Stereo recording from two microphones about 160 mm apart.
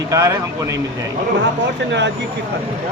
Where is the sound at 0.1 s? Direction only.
20° right (ahead or behind).